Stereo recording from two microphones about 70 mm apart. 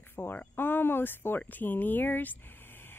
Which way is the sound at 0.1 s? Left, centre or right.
Left.